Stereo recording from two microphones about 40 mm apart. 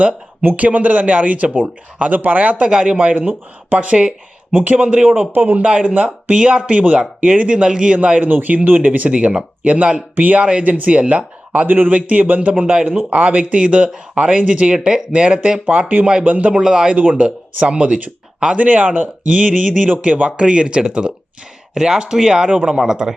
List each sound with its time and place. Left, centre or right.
0.4 s speech: right
2.6 s speech: right
5.3 s speech: right
5.6 s speech: right
8.3 s speech: right
11.7 s speech: right
16.5 s speech: centre
16.9 s speech: right
17.7 s speech: right
18.5 s speech: right
20.3 s speech: right